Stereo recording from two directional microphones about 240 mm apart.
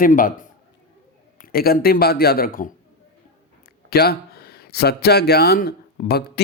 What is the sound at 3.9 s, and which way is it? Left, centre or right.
Speech, left.